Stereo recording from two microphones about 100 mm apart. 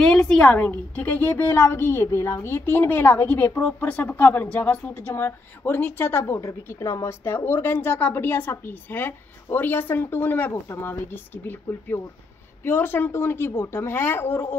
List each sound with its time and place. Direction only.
0.0 s speech: 10° left (ahead or behind); by 14.5 s 25° left (ahead or behind)